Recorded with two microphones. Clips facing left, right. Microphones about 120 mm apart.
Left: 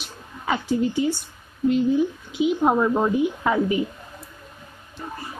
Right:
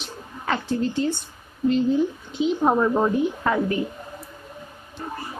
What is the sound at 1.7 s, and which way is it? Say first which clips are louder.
A woman's voice: even; 5° left (ahead or behind).